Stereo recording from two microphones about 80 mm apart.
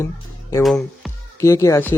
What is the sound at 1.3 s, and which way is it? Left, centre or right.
Speech, left.